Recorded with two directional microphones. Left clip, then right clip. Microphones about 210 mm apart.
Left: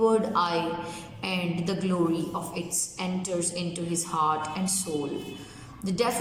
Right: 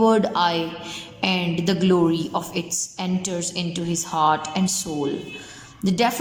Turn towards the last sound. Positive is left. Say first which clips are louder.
# right 6 dB
turn(degrees=-45)  # may be behind; listen again after turning